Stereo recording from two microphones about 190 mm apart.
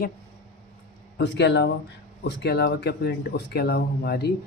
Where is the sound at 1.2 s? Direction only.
65° left (ahead or behind).